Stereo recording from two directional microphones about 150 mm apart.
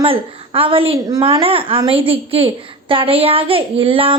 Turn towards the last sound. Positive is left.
turn(degrees=-35)  # may be behind; listen again after turning